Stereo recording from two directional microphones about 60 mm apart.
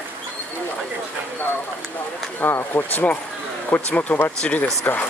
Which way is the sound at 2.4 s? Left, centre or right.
Left.